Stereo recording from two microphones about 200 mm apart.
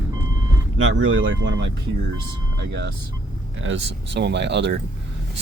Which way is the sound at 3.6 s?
70° right (ahead or behind).